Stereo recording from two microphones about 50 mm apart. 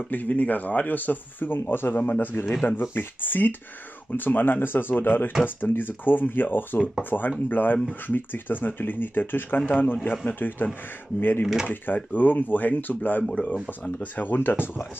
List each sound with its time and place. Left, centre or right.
0.1 s speech: left
13.3 s speech: left
13.9 s speech: left